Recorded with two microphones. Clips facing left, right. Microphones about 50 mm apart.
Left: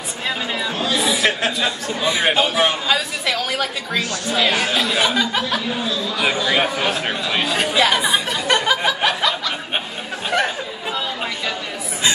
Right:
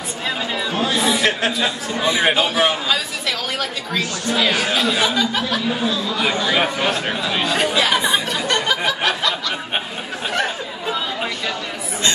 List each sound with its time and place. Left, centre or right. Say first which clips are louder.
0.6 s chatter: right 2 dB; centre
2.0 s speech: right 1 dB; centre